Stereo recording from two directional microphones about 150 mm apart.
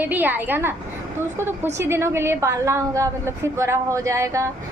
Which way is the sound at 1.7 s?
15° right (ahead or behind).